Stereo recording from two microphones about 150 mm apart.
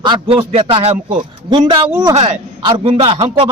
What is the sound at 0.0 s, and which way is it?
A man's voice, 35° right (ahead or behind).